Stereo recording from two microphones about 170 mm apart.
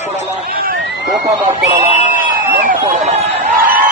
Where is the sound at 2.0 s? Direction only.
55° right (ahead or behind).